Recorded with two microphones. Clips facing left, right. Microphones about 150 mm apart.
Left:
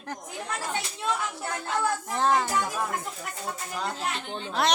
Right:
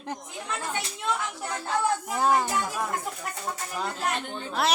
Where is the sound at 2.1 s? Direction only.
10° right (ahead or behind).